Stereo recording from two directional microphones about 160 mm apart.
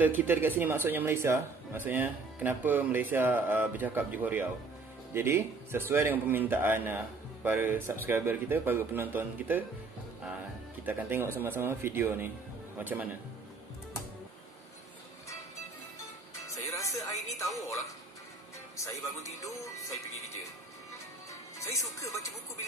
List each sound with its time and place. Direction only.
0.0 s speech: 10° right (ahead or behind)
10.9 s speech: 15° right (ahead or behind)
16.4 s music: 20° left (ahead or behind)
17.4 s speech: 20° left (ahead or behind)
19.2 s speech: 20° left (ahead or behind)
21.3 s speech: 20° left (ahead or behind)